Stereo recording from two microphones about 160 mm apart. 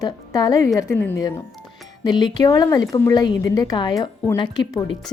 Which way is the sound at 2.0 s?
25° left (ahead or behind).